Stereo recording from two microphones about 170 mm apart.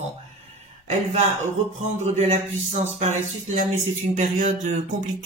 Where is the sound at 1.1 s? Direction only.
40° right (ahead or behind).